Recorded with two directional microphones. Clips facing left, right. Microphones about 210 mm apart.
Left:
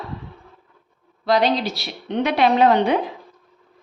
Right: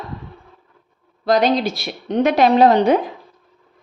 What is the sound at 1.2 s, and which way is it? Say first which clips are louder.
A woman's voice: right 3 dB; 45° right (ahead or behind).